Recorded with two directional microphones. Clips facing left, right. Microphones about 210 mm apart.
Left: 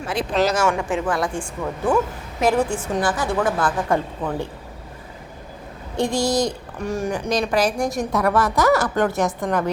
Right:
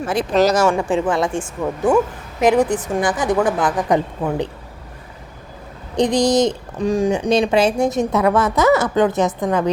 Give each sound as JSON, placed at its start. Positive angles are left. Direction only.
{"t": 0.1, "sound": "a woman's voice", "side_deg": -45}
{"t": 6.0, "sound": "a woman's voice", "side_deg": -20}
{"t": 7.1, "sound": "a woman's voice", "side_deg": -25}